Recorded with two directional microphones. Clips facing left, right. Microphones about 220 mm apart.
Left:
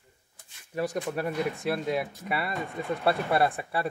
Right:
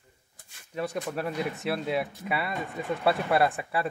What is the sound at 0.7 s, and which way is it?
Speech, centre (ahead or behind).